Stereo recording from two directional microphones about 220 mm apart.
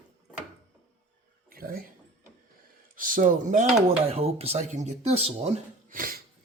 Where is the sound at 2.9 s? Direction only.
40° right (ahead or behind).